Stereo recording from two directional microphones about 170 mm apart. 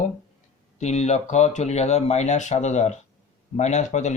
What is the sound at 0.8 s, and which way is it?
Speech, 40° left (ahead or behind).